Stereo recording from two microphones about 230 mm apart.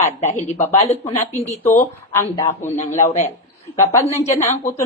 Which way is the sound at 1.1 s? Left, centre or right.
Centre.